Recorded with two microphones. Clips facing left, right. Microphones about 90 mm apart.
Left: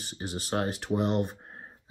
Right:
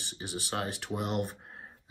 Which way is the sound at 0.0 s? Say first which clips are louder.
Left 3 dB; 40° left (ahead or behind).